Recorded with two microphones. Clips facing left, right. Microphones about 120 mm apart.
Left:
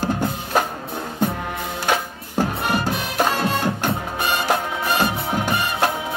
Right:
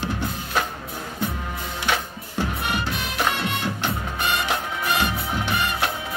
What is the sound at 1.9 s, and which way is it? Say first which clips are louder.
Music: left 3 dB; 40° left (ahead or behind).